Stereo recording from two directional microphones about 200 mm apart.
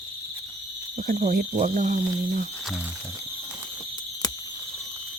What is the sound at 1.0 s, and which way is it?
Speech, 40° right (ahead or behind).